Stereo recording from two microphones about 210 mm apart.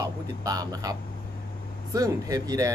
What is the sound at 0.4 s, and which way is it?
Speech, 15° right (ahead or behind).